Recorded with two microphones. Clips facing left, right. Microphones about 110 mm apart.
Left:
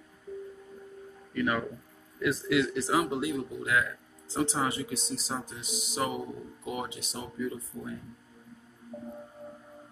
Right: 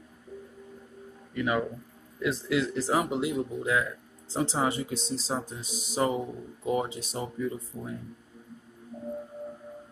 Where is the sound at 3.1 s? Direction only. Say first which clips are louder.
Right 2 dB; 25° right (ahead or behind).